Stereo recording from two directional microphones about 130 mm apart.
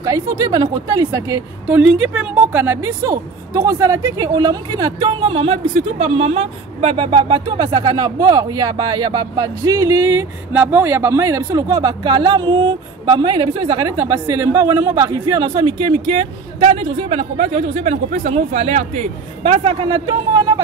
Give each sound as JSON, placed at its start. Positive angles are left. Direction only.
{"t": 0.0, "sound": "a woman's voice", "side_deg": -25}
{"t": 1.7, "sound": "a woman's voice", "side_deg": -5}
{"t": 2.3, "sound": "a woman's voice", "side_deg": -15}
{"t": 20.1, "sound": "a woman's voice", "side_deg": -30}